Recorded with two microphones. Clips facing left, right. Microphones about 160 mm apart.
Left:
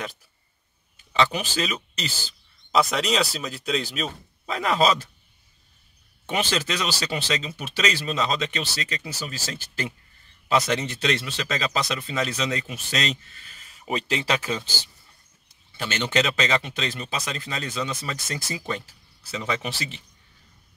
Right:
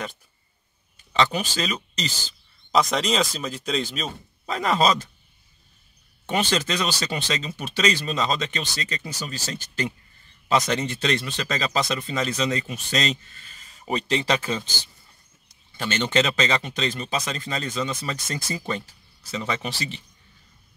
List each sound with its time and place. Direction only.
0.9 s speech: 5° left (ahead or behind)
6.2 s speech: 5° left (ahead or behind)
15.8 s speech: 5° left (ahead or behind)